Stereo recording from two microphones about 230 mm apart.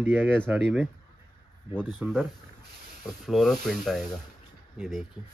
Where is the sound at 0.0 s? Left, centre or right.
Centre.